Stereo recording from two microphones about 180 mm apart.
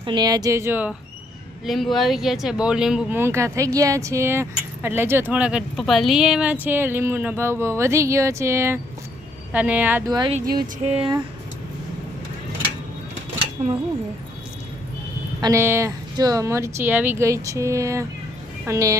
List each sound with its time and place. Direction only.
0.0 s speech: 25° right (ahead or behind)
1.6 s speech: centre (ahead or behind)
10.1 s speech: 25° right (ahead or behind)
10.4 s music: 55° right (ahead or behind)
10.8 s speech: 35° right (ahead or behind)
15.4 s speech: 20° right (ahead or behind)